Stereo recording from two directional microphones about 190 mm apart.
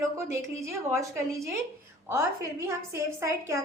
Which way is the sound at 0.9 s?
15° right (ahead or behind).